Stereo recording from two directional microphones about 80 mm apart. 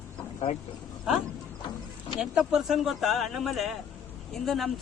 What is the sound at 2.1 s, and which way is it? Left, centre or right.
Speech, centre.